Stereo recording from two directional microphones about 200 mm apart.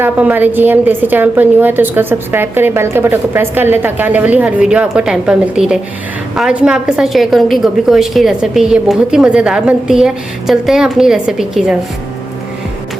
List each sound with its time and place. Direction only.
0.0 s a woman's voice: 10° right (ahead or behind)